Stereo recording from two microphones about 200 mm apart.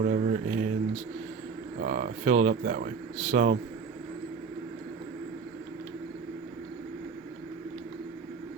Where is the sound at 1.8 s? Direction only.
40° right (ahead or behind).